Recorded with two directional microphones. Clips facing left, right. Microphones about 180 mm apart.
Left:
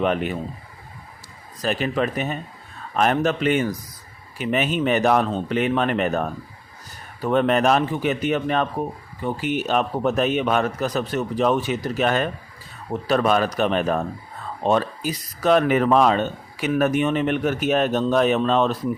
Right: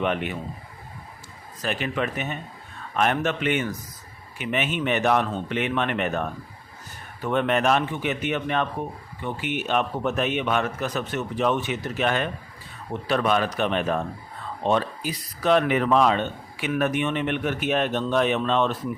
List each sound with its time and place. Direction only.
0.0 s speech: 40° left (ahead or behind)
1.6 s speech: 35° left (ahead or behind)